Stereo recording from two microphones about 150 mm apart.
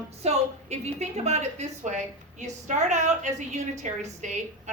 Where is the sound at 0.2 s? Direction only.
45° right (ahead or behind).